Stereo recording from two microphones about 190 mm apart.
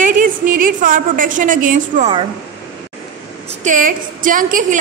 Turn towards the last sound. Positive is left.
turn(degrees=-45)  # may be behind; listen again after turning